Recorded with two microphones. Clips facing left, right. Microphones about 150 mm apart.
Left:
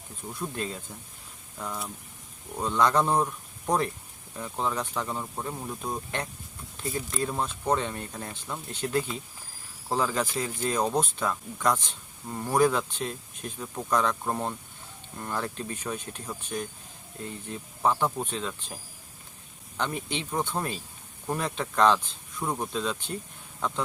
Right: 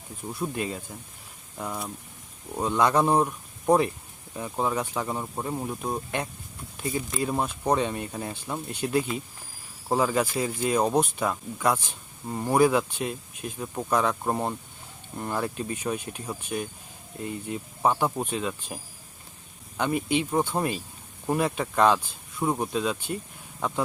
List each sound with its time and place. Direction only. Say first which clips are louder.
0.3 s speech: right 3 dB; 10° right (ahead or behind)